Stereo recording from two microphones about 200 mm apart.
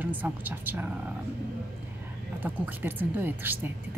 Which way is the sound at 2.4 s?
10° right (ahead or behind).